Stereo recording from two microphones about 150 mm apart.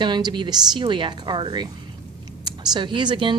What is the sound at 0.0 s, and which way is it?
A woman's voice, 30° right (ahead or behind).